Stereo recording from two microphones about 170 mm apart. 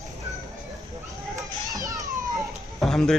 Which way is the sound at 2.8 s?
5° left (ahead or behind).